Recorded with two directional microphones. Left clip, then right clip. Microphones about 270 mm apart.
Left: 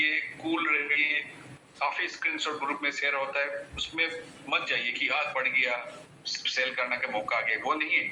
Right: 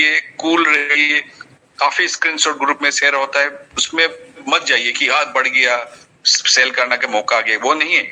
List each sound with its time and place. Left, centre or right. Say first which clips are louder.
0.0 s a man's voice: right 13 dB; right